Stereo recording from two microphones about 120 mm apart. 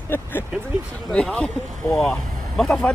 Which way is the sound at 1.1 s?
10° left (ahead or behind).